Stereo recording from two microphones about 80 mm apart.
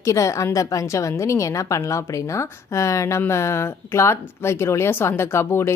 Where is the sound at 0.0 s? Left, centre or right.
Left.